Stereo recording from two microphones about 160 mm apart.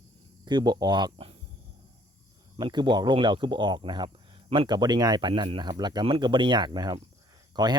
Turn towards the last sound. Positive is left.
turn(degrees=-25)  # may be behind; listen again after turning